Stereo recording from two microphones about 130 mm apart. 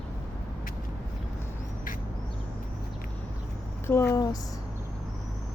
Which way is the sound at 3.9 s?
20° left (ahead or behind).